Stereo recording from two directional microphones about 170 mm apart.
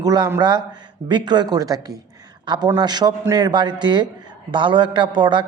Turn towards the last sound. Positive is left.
turn(degrees=-25)  # may be behind; listen again after turning